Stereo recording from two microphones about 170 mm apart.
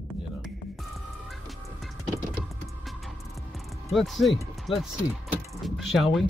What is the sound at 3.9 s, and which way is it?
Speech, centre (ahead or behind).